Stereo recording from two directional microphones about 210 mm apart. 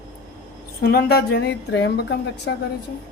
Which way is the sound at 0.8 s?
50° left (ahead or behind).